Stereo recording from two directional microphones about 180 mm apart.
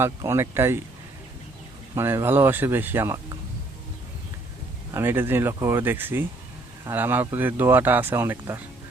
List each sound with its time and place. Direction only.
0.0 s speech: 15° right (ahead or behind)
2.0 s speech: 15° right (ahead or behind)
4.9 s speech: 10° right (ahead or behind)